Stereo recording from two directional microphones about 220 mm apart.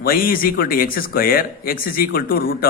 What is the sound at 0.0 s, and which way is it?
A man's voice, 40° left (ahead or behind).